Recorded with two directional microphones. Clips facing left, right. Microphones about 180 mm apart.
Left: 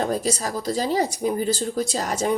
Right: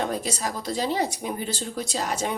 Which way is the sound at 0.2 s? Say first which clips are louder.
Left 4 dB; 40° left (ahead or behind).